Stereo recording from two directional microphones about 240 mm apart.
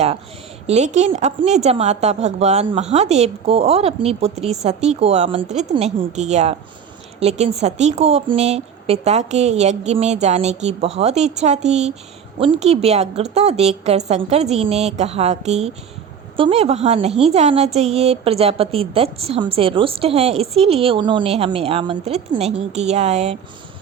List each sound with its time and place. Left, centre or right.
0.7 s a woman's voice: right